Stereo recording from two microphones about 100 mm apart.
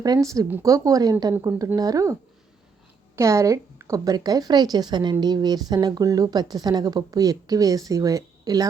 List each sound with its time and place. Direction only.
0.0 s speech: 40° right (ahead or behind)
3.2 s speech: 30° right (ahead or behind)